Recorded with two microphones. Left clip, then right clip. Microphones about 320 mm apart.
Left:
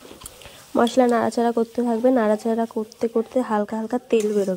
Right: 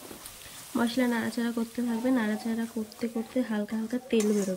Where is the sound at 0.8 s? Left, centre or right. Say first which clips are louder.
Left 11 dB; centre.